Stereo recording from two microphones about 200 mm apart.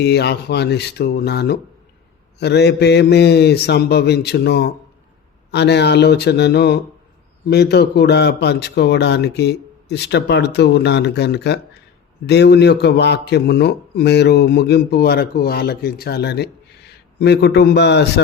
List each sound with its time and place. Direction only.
0.0 s a man's voice: 55° left (ahead or behind)